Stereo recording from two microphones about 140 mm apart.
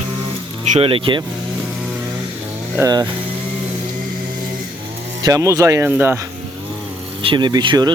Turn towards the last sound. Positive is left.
turn(degrees=-30)  # may be behind; listen again after turning